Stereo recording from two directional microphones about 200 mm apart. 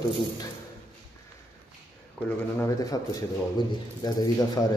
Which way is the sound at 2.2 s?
10° left (ahead or behind).